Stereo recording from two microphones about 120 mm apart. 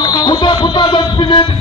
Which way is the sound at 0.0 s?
35° left (ahead or behind).